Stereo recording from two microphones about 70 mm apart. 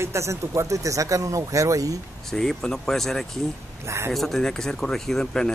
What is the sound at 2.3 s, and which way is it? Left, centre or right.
Speech, centre.